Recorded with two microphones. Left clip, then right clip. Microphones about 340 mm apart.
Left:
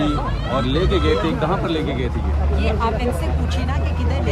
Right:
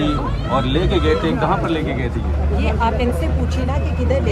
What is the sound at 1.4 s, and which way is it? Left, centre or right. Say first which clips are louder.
Speech: right 2 dB; centre.